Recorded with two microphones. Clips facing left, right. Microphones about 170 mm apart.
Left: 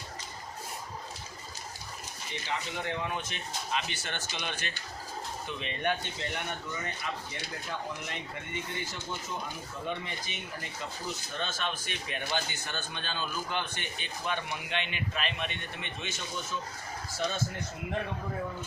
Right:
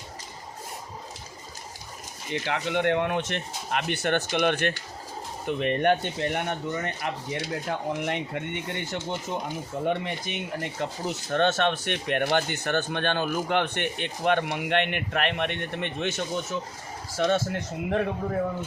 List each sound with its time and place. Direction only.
2.3 s speech: 75° right (ahead or behind)
12.4 s speech: 65° right (ahead or behind)
17.2 s speech: 90° right